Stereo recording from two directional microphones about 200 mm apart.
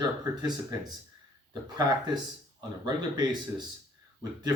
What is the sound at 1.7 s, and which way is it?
Speech, 20° right (ahead or behind).